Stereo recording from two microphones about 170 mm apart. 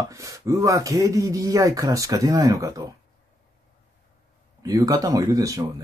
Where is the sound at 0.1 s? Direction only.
20° right (ahead or behind).